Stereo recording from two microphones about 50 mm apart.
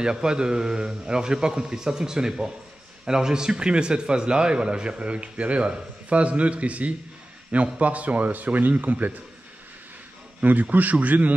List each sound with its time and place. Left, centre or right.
0.0 s a man's voice: centre; by 9.1 s right
10.4 s speech: right